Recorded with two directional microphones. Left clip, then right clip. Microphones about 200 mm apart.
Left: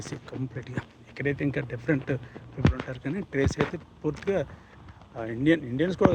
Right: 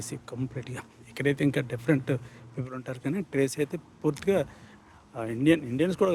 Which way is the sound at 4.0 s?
25° right (ahead or behind).